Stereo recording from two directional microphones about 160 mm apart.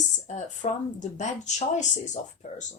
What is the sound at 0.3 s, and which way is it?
Speech, 50° left (ahead or behind).